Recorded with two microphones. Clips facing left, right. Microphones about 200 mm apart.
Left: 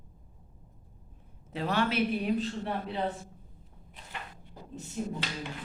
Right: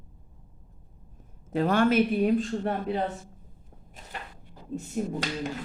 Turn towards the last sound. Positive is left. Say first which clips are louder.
# right 5 dB
turn(degrees=-50)  # may be behind; listen again after turning